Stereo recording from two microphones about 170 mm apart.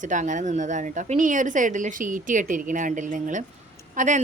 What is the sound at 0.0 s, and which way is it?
A woman's voice, 45° right (ahead or behind).